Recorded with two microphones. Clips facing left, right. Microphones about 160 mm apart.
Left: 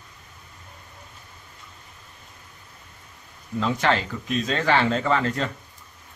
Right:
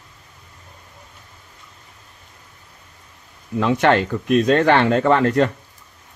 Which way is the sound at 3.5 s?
65° right (ahead or behind).